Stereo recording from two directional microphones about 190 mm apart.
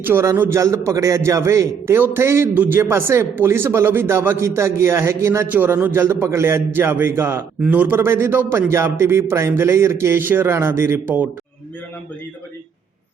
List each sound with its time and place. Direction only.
0.0 s a man's voice: 10° right (ahead or behind)